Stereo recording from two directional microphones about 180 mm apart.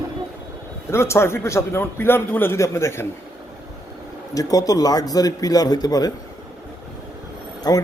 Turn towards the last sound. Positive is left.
turn(degrees=20)  # may be behind; listen again after turning